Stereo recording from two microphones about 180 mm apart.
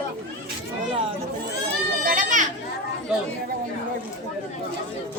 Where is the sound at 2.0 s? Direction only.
50° right (ahead or behind).